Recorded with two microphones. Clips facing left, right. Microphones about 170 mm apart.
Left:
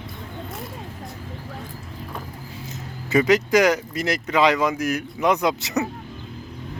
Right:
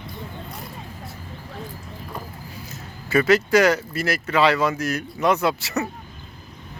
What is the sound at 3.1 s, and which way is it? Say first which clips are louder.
Speech: even; 15° left (ahead or behind).